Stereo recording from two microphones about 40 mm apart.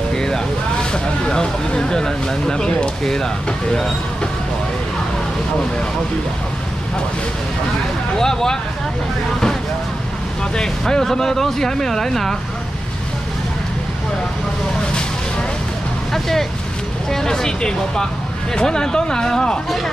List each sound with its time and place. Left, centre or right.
0.1 s vehicle: centre
0.9 s speech: left
8.2 s speech: centre
10.5 s speech: centre
16.1 s speech: centre